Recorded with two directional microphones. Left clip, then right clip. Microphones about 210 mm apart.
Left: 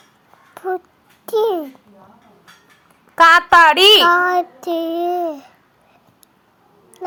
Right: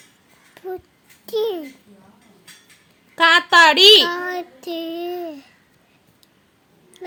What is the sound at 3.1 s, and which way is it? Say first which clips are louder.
Speech: left 4 dB; 5° left (ahead or behind).